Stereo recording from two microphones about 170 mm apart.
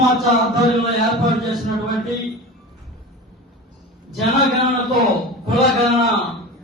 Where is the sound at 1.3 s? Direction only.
Centre (ahead or behind).